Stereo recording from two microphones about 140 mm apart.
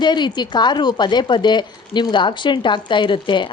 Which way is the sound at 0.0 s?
30° left (ahead or behind).